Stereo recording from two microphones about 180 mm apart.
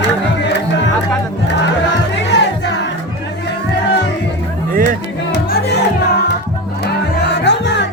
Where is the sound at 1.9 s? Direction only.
75° left (ahead or behind).